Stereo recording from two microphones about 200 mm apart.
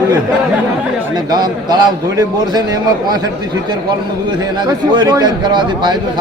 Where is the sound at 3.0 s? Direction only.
20° right (ahead or behind).